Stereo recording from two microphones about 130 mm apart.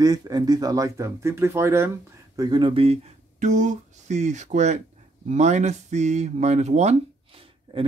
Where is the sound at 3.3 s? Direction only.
75° right (ahead or behind).